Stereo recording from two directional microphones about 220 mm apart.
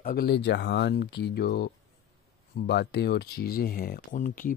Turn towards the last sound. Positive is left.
turn(degrees=35)  # may be behind; listen again after turning